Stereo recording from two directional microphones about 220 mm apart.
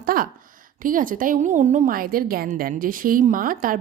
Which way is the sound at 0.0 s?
40° right (ahead or behind).